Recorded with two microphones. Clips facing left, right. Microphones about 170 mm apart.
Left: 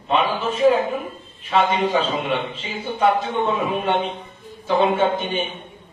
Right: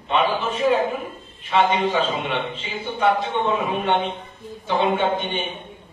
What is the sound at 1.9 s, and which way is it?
Speech, 40° left (ahead or behind).